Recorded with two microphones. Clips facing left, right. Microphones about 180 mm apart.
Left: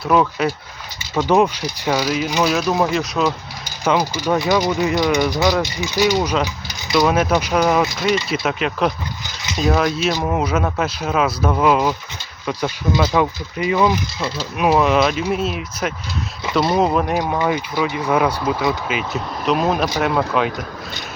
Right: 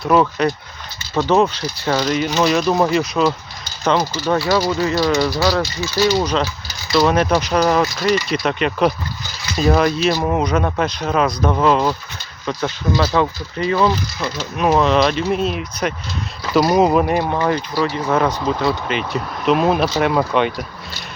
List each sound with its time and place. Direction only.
0.0 s speech: centre (ahead or behind)
1.1 s speech: 15° left (ahead or behind)
3.8 s speech: 10° left (ahead or behind)
17.3 s speech: 10° left (ahead or behind)